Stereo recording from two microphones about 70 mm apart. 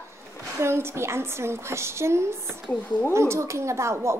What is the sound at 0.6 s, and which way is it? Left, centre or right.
A woman's voice, right.